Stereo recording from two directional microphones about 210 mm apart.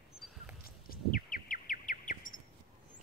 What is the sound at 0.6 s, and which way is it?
Bird, 45° left (ahead or behind).